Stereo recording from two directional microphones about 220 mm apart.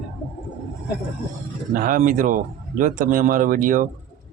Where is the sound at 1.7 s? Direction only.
40° right (ahead or behind).